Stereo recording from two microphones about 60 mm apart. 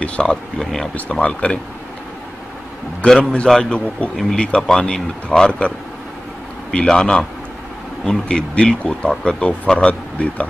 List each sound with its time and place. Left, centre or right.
0.2 s speech: centre
1.2 s speech: centre
3.1 s speech: centre
6.7 s speech: centre